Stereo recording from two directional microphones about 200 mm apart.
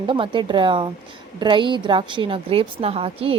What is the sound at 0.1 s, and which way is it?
A woman's voice, 25° right (ahead or behind).